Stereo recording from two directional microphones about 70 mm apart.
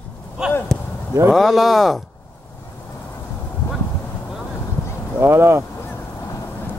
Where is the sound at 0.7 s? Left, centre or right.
Centre.